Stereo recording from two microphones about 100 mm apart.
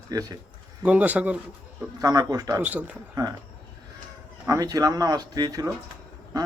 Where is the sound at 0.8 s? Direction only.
15° right (ahead or behind).